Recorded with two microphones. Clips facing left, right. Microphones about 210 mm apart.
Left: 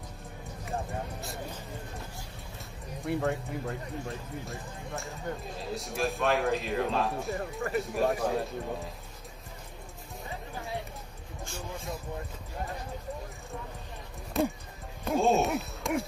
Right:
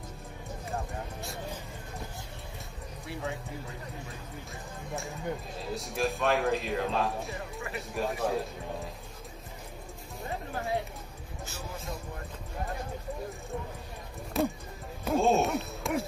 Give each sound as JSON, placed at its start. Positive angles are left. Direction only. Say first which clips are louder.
{"t": 3.1, "sound": "speech", "louder": "left 7 dB", "side_deg": 50}
{"t": 4.5, "sound": "a man's voice", "louder": "left 1 dB", "side_deg": 0}
{"t": 14.3, "sound": "a sound", "louder": "even", "side_deg": 0}